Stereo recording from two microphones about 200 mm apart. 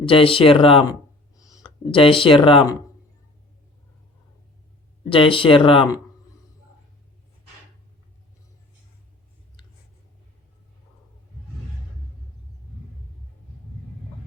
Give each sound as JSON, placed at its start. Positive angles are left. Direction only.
{"t": 0.0, "sound": "speech", "side_deg": 25}
{"t": 5.0, "sound": "speech", "side_deg": 25}